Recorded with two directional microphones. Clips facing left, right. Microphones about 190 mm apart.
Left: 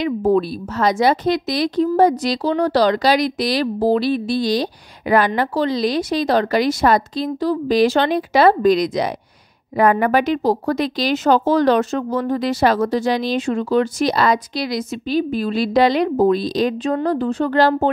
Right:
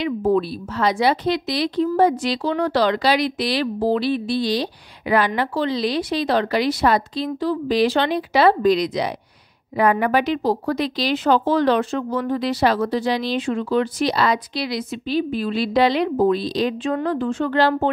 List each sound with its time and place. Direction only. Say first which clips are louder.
0.0 s speech: left 2 dB; 45° left (ahead or behind)